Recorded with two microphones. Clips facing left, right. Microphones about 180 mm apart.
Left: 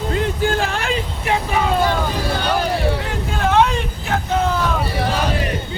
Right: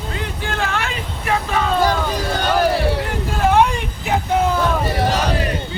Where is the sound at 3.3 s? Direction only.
10° right (ahead or behind).